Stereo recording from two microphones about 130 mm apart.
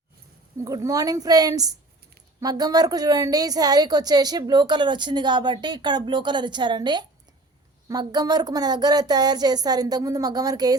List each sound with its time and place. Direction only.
0.6 s a woman's voice: 30° right (ahead or behind)